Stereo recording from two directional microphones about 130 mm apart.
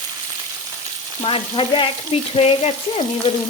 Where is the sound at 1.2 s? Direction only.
45° left (ahead or behind).